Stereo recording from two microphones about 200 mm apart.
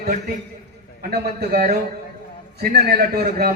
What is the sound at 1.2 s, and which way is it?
A man's voice, 50° right (ahead or behind).